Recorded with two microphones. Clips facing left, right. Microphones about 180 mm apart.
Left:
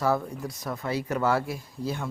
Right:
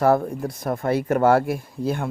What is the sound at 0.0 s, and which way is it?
Speech, 55° right (ahead or behind).